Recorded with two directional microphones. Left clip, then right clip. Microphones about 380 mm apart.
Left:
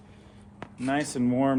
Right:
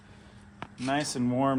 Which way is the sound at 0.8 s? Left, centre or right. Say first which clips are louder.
Left 2 dB; centre.